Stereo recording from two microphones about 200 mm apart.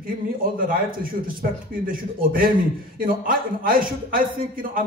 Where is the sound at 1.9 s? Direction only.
45° right (ahead or behind).